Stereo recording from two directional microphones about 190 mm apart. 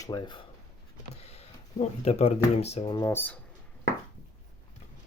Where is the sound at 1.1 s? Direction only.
35° left (ahead or behind).